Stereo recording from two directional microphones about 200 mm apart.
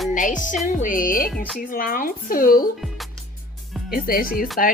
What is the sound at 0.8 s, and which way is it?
Speech, 40° left (ahead or behind).